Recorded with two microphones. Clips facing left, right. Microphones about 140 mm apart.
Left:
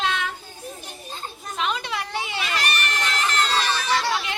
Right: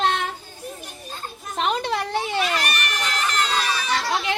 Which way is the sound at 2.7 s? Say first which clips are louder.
Even; 10° right (ahead or behind).